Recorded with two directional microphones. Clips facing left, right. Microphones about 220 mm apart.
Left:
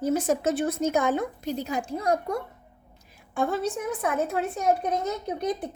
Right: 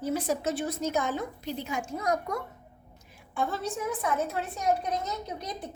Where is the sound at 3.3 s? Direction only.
50° left (ahead or behind).